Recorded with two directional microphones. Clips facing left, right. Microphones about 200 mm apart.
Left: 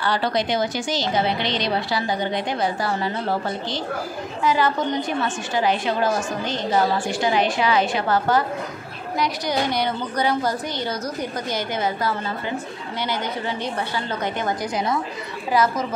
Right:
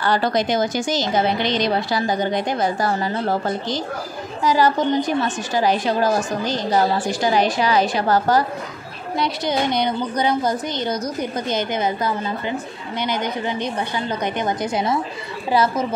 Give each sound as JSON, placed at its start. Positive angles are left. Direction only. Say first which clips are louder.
{"t": 0.0, "sound": "a woman's voice", "louder": "right 3 dB", "side_deg": -45}
{"t": 9.2, "sound": "a woman's voice", "louder": "right 2 dB", "side_deg": -20}